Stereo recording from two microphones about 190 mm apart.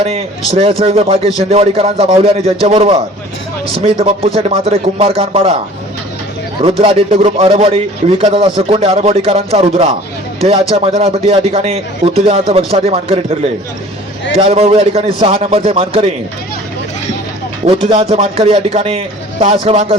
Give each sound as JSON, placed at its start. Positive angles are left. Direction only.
{"t": 0.0, "sound": "a man's voice", "side_deg": -35}
{"t": 6.6, "sound": "a man's voice", "side_deg": -30}
{"t": 17.7, "sound": "a man's voice", "side_deg": -30}